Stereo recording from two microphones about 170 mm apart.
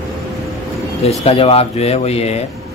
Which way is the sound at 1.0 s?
35° left (ahead or behind).